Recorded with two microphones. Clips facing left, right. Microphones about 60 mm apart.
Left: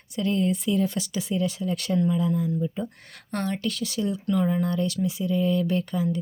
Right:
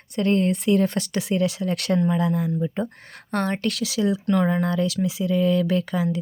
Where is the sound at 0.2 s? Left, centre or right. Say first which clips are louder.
Right 4 dB; right.